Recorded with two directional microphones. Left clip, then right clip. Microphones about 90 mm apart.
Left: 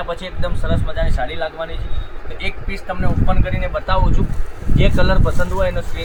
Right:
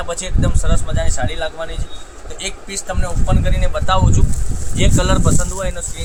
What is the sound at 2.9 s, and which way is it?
Speech, 35° right (ahead or behind).